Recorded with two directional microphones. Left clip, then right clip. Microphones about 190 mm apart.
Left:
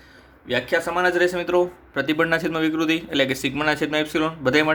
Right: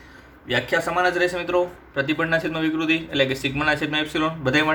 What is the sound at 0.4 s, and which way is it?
Speech, 25° left (ahead or behind).